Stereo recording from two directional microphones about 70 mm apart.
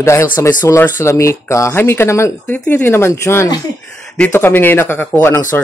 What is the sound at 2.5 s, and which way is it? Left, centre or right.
Speech, left.